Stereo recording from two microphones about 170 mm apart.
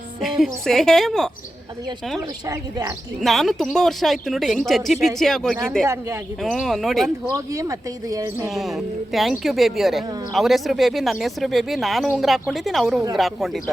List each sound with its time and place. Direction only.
0.2 s speech: centre (ahead or behind)
2.5 s speech: 20° right (ahead or behind)
3.2 s speech: centre (ahead or behind)
5.8 s speech: 15° right (ahead or behind)
6.4 s speech: centre (ahead or behind)
7.3 s speech: 20° right (ahead or behind)
8.4 s speech: centre (ahead or behind)